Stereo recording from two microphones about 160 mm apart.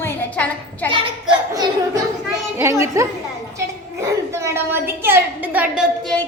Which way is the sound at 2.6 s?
15° right (ahead or behind).